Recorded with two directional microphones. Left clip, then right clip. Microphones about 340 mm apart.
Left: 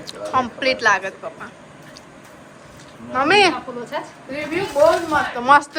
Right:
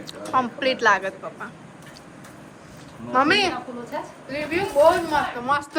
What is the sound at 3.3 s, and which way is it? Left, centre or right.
Speech, centre.